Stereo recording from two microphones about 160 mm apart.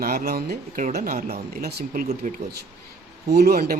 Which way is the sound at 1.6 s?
75° right (ahead or behind).